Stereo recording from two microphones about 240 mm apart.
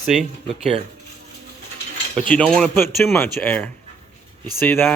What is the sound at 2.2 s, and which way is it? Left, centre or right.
Speech, centre.